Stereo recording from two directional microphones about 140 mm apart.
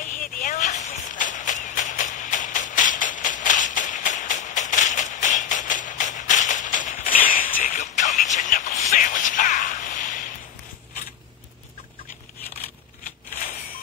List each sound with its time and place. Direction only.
0.2 s shuffle: 70° left (ahead or behind)